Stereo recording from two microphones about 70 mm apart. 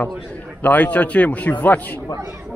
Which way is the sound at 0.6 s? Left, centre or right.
Left.